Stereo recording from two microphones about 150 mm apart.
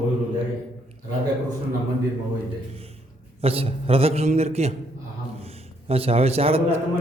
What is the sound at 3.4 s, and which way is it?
A man's voice, 40° right (ahead or behind).